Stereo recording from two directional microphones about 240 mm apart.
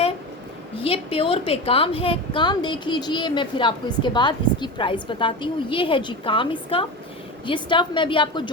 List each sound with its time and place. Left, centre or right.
0.8 s a woman's voice: left